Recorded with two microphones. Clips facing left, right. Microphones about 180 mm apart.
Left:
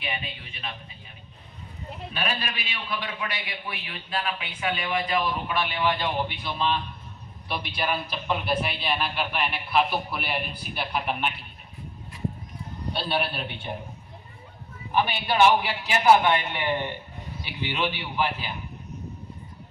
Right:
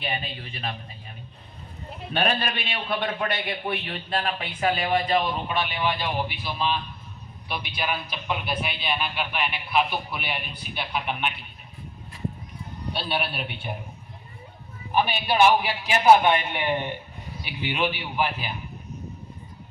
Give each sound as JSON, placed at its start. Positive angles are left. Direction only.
{"t": 0.0, "sound": "a man's voice", "side_deg": -35}
{"t": 2.1, "sound": "a man's voice", "side_deg": -60}
{"t": 7.8, "sound": "a man's voice", "side_deg": 0}
{"t": 12.9, "sound": "a man's voice", "side_deg": 0}
{"t": 14.9, "sound": "a man's voice", "side_deg": -15}